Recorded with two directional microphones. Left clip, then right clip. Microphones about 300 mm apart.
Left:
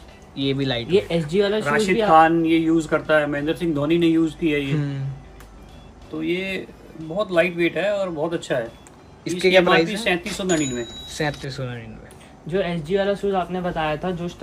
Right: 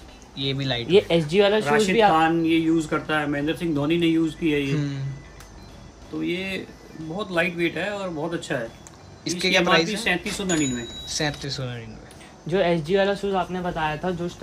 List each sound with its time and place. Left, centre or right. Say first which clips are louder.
0.4 s speech: left 3 dB; centre
0.8 s speech: right 4 dB; right
1.6 s speech: right 1 dB; centre
6.2 s speech: left 3 dB; centre
12.4 s speech: right 2 dB; right
13.1 s speech: left 2 dB; centre